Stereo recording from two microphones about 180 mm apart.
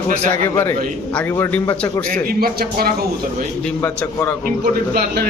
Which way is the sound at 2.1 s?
55° right (ahead or behind).